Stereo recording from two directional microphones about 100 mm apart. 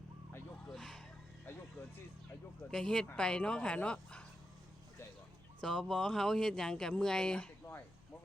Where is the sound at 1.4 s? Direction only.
25° left (ahead or behind).